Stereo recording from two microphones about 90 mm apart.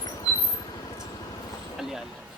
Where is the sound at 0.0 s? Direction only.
45° left (ahead or behind).